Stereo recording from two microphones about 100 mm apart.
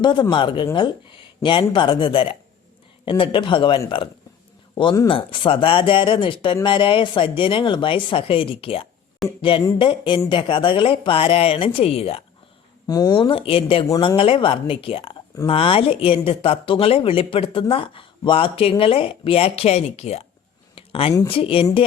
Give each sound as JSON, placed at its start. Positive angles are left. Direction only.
{"t": 0.0, "sound": "speech", "side_deg": 50}
{"t": 12.9, "sound": "speech", "side_deg": 40}
{"t": 13.1, "sound": "speech", "side_deg": 60}
{"t": 20.7, "sound": "a sound", "side_deg": 70}
{"t": 21.2, "sound": "speech", "side_deg": 65}